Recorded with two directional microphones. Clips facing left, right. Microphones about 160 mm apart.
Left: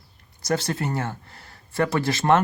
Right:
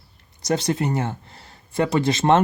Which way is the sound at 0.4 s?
20° right (ahead or behind).